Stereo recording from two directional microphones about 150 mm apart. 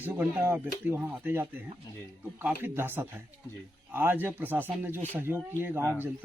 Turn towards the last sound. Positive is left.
turn(degrees=-15)  # may be behind; listen again after turning